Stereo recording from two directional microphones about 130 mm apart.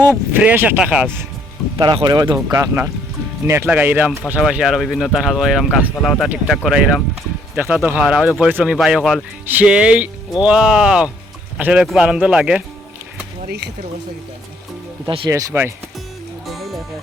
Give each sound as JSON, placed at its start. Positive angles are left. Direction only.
{"t": 0.1, "sound": "speech", "side_deg": -10}
{"t": 2.0, "sound": "speech", "side_deg": -35}
{"t": 15.0, "sound": "speech", "side_deg": -40}
{"t": 15.3, "sound": "speech", "side_deg": -20}
{"t": 16.5, "sound": "music", "side_deg": 0}